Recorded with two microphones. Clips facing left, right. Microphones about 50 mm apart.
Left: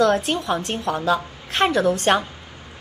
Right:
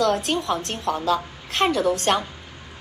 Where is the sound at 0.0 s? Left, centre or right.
Centre.